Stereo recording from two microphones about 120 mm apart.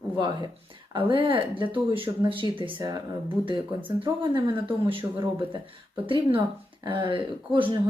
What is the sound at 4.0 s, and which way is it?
Speech, 40° right (ahead or behind).